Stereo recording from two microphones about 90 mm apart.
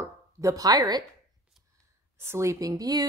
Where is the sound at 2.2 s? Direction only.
30° right (ahead or behind).